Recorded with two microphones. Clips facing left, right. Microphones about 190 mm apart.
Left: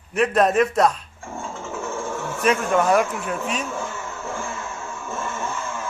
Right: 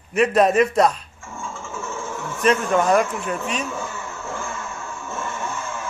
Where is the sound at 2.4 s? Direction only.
5° left (ahead or behind).